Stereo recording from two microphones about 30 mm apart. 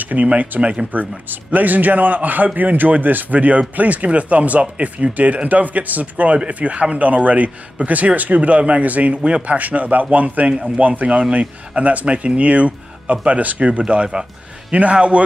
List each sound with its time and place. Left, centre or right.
0.0 s speech: right
0.6 s speech: right
1.5 s a man's voice: right
3.3 s speech: right
5.5 s speech: right
8.8 s a man's voice: right
11.1 s speech: right
11.3 s speech: right